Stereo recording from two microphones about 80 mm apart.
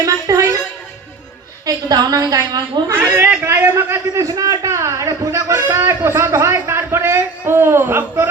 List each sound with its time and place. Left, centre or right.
0.0 s a sound: right
1.6 s a man's voice: right
2.9 s a man's voice: right
3.4 s a man's voice: right
4.2 s a man's voice: right
5.5 s a man's voice: right